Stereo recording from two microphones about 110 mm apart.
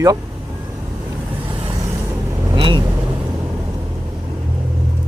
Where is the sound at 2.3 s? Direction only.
25° right (ahead or behind).